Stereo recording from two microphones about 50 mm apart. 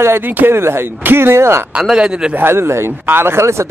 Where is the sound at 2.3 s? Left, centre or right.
Right.